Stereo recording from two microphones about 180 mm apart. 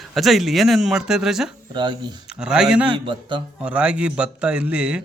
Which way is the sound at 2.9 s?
25° right (ahead or behind).